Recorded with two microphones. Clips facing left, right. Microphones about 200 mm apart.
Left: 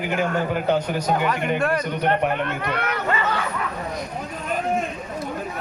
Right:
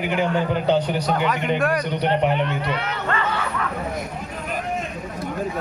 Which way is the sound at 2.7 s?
55° left (ahead or behind).